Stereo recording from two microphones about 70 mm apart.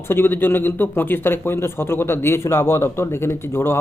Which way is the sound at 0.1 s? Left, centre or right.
Left.